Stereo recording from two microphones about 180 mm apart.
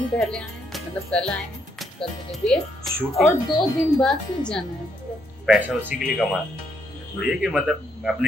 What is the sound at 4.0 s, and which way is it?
Speech, 5° left (ahead or behind).